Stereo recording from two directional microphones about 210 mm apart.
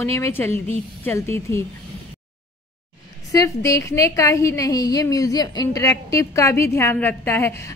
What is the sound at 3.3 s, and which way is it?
A woman's voice, 15° left (ahead or behind).